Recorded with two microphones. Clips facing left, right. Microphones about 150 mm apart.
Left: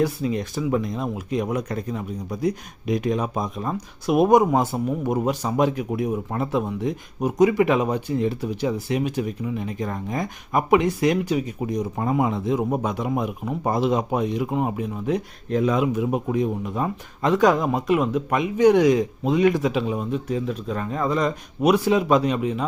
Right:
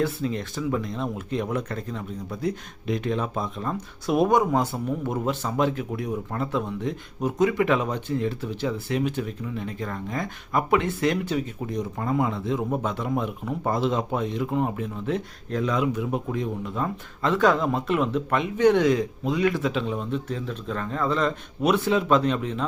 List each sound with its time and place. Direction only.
0.0 s speech: 15° left (ahead or behind)